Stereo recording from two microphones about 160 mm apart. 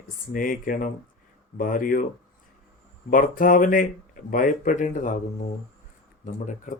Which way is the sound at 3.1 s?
60° left (ahead or behind).